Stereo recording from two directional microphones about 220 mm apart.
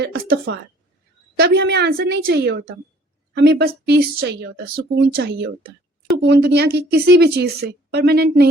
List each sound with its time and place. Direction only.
0.0 s speech: 45° right (ahead or behind)